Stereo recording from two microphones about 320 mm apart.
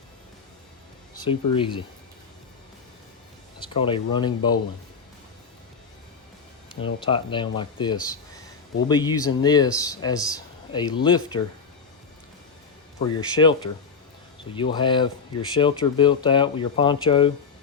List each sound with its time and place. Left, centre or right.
1.2 s speech: centre
3.6 s speech: centre
6.8 s speech: centre
13.1 s speech: centre